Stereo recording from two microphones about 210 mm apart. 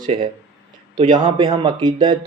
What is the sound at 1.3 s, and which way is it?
Speech, 25° right (ahead or behind).